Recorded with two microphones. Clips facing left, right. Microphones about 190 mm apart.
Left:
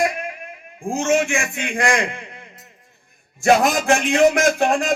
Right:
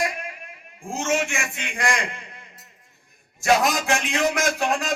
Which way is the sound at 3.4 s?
50° left (ahead or behind).